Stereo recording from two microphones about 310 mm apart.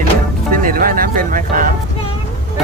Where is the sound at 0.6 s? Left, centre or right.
Right.